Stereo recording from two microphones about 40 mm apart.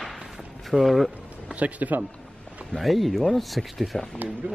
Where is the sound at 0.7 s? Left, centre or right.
Centre.